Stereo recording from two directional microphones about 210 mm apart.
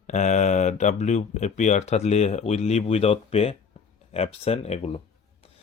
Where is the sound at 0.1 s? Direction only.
35° left (ahead or behind).